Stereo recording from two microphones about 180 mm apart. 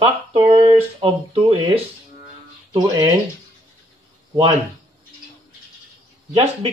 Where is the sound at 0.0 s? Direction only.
30° right (ahead or behind).